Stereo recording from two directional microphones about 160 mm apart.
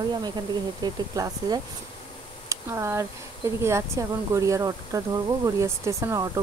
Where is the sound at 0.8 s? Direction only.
25° right (ahead or behind).